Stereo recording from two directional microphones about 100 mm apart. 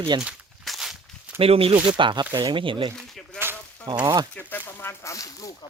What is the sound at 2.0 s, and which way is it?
Speech, 50° right (ahead or behind).